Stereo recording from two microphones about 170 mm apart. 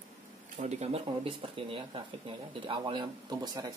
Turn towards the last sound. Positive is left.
turn(degrees=-25)  # may be behind; listen again after turning